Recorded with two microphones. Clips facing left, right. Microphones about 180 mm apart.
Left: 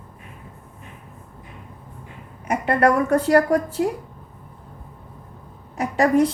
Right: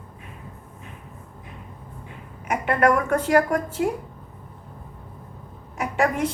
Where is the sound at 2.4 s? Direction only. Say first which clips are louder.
Left 2 dB; 35° left (ahead or behind).